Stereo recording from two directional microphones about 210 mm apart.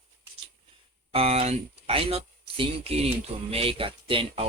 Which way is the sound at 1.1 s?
25° right (ahead or behind).